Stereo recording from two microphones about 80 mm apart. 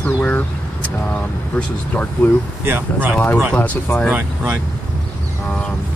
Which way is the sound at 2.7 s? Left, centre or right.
Right.